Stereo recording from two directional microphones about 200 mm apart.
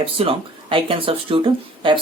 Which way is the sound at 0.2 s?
25° right (ahead or behind).